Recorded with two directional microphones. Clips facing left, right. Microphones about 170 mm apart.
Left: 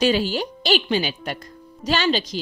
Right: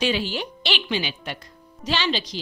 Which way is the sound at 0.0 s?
40° left (ahead or behind).